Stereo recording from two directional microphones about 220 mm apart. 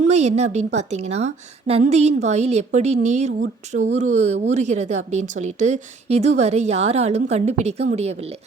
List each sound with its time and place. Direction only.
0.0 s a woman's voice: 30° right (ahead or behind)